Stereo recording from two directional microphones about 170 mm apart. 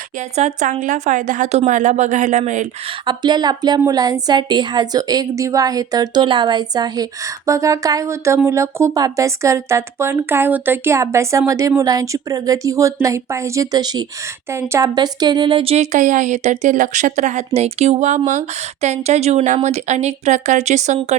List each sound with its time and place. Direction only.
0.3 s a woman's voice: 45° right (ahead or behind)
3.1 s a woman's voice: 25° right (ahead or behind); by 21.2 s 45° right (ahead or behind)